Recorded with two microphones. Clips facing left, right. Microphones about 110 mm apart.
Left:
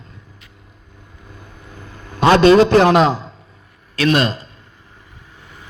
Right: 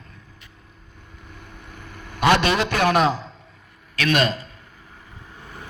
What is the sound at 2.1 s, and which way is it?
A man's voice, 30° left (ahead or behind).